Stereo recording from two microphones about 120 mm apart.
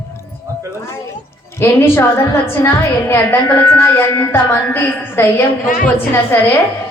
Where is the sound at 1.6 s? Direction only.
20° left (ahead or behind).